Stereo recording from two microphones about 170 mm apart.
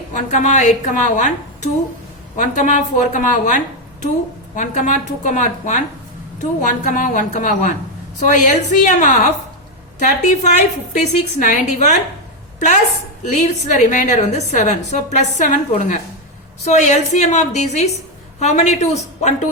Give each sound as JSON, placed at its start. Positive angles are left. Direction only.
{"t": 0.1, "sound": "a woman's voice", "side_deg": 45}
{"t": 4.5, "sound": "a woman's voice", "side_deg": 45}